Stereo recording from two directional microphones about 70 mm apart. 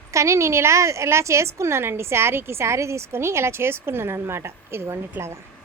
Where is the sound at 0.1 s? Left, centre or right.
Right.